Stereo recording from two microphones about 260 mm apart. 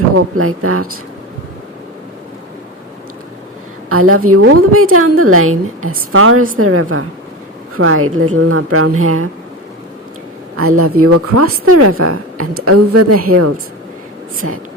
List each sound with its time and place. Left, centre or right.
0.3 s a woman's voice: right
3.8 s a woman's voice: right
10.6 s a woman's voice: right